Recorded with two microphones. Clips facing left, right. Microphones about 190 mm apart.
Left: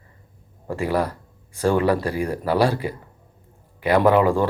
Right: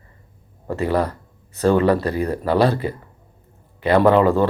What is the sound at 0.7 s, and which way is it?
Speech, 10° left (ahead or behind).